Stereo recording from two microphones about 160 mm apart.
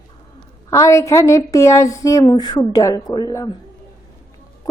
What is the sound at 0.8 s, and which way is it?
A woman's voice, 20° left (ahead or behind).